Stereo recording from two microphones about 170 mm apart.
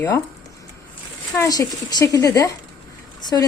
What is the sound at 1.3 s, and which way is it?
A woman's voice, 20° left (ahead or behind).